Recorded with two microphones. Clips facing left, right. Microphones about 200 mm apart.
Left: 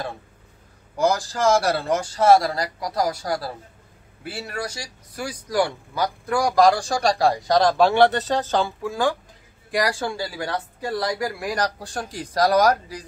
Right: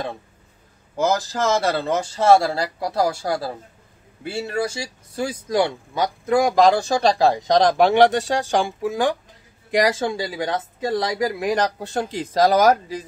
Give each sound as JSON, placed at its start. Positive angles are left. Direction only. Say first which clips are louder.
{"t": 0.9, "sound": "speech", "louder": "right 1 dB", "side_deg": -20}